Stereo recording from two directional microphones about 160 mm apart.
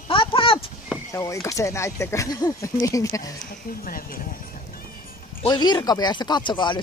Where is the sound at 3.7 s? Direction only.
65° left (ahead or behind).